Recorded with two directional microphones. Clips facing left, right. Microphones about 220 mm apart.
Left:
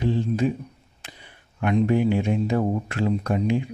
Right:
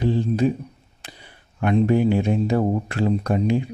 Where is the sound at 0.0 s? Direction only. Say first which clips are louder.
Right 3 dB; 35° right (ahead or behind).